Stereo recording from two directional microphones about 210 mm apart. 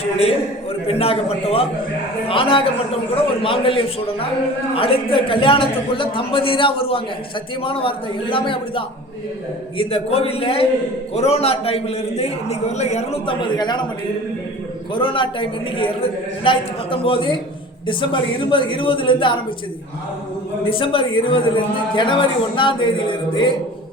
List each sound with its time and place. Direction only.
0.0 s a man's voice: 30° left (ahead or behind)
14.9 s a man's voice: 25° left (ahead or behind)
20.7 s a man's voice: 25° left (ahead or behind)